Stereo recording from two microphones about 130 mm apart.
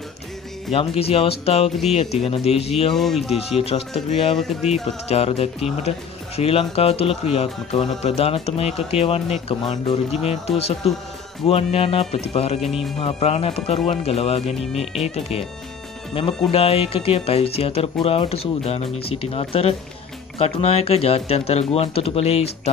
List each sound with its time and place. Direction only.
0.7 s speech: 45° left (ahead or behind)
2.9 s speech: centre (ahead or behind)
3.3 s speech: 50° left (ahead or behind)
4.4 s speech: centre (ahead or behind)
4.8 s speech: 50° left (ahead or behind)
14.7 s speech: centre (ahead or behind)
15.0 s speech: 55° left (ahead or behind)
16.4 s speech: 50° left (ahead or behind)